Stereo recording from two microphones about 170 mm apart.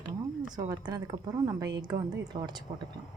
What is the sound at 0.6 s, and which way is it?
A woman's voice, 25° right (ahead or behind).